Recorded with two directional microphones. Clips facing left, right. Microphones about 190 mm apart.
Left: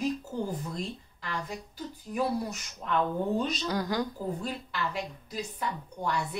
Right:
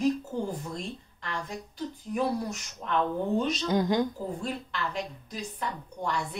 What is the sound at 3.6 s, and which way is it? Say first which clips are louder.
Speech: right 4 dB; 20° right (ahead or behind).